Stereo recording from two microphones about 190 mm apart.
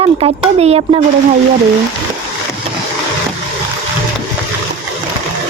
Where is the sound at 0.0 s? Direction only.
30° right (ahead or behind).